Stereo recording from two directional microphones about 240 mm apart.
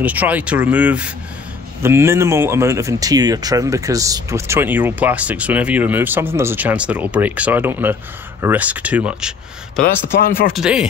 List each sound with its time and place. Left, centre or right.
0.0 s speech: centre
10.2 s speech: left
10.5 s speech: centre